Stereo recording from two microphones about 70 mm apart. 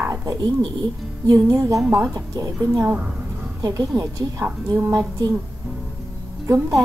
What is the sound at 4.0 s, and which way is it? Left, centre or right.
Speech, right.